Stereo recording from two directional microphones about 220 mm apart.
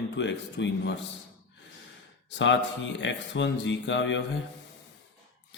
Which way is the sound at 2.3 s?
55° left (ahead or behind).